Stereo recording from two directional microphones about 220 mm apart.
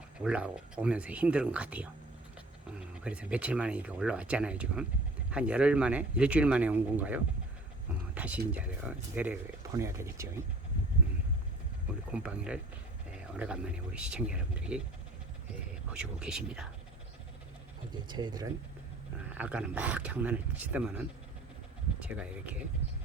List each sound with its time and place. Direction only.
0.2 s speech: 5° right (ahead or behind)
8.1 s a sound: 5° right (ahead or behind)
8.5 s speech: 5° right (ahead or behind)
12.1 s speech: 5° right (ahead or behind)
15.9 s speech: 5° right (ahead or behind)
17.9 s speech: 20° right (ahead or behind)
19.3 s speech: 5° right (ahead or behind)